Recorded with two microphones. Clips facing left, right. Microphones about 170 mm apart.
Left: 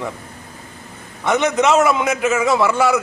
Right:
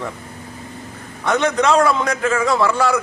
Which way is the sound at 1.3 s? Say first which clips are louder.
Left 1 dB; 15° left (ahead or behind).